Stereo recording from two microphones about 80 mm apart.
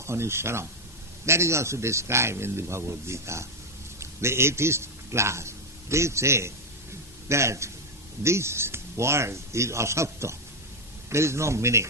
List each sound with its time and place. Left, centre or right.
0.0 s a man's voice: right